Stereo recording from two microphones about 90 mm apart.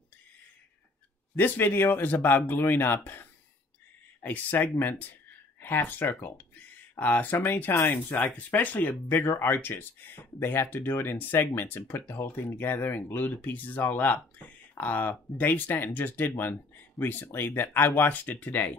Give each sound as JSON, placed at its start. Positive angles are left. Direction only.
{"t": 1.3, "sound": "speech", "side_deg": 20}